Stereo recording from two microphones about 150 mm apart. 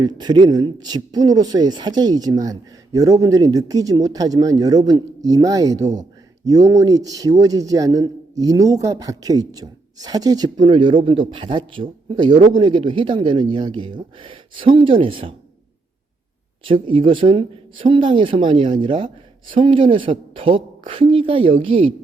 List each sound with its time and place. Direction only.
0.0 s speech: 30° right (ahead or behind)
16.6 s speech: 35° right (ahead or behind)